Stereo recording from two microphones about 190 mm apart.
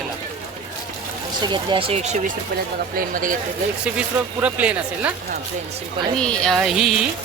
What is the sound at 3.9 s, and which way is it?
Speech, 5° right (ahead or behind).